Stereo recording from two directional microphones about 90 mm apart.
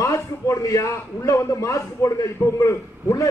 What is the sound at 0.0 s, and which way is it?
A man's voice, 35° left (ahead or behind).